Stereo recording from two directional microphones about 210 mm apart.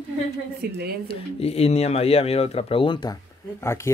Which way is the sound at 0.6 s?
45° right (ahead or behind).